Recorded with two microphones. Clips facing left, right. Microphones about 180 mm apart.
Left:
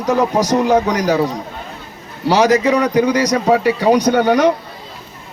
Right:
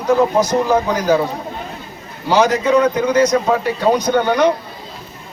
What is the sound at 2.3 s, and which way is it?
A man's voice, 75° left (ahead or behind).